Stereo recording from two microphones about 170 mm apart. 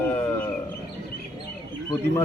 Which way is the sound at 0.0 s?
10° left (ahead or behind).